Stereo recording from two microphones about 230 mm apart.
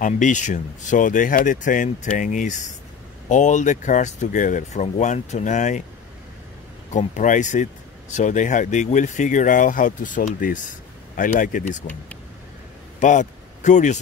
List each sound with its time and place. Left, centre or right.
0.0 s speech: left
6.9 s speech: left
13.0 s a man's voice: left